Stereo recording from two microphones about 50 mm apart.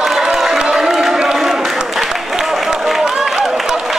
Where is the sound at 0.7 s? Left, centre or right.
Centre.